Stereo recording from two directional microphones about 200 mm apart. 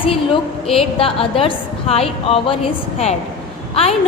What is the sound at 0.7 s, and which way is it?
A woman's voice, 30° left (ahead or behind).